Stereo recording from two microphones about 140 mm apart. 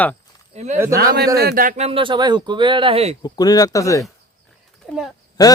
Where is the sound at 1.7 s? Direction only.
50° right (ahead or behind).